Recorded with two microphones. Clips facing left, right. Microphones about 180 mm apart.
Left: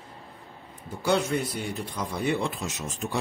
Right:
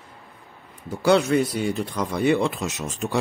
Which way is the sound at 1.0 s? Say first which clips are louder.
Right 7 dB; 80° right.